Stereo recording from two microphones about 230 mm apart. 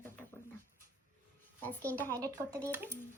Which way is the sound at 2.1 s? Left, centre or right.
Centre.